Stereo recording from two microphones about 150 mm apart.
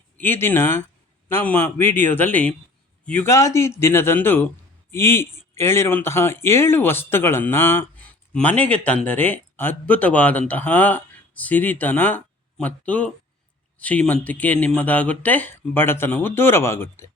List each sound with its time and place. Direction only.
0.2 s speech: 15° left (ahead or behind)